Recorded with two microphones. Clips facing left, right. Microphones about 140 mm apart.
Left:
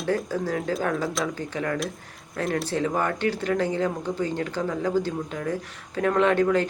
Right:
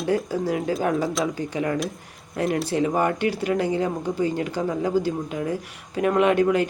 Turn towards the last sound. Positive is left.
turn(degrees=-15)  # may be behind; listen again after turning